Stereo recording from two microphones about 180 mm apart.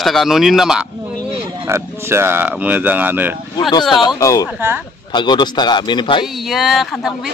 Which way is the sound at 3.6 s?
25° left (ahead or behind).